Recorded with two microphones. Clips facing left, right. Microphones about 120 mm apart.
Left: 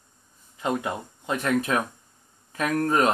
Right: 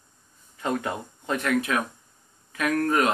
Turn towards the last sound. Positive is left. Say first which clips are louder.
# left 1 dB
turn(degrees=30)  # may be behind; listen again after turning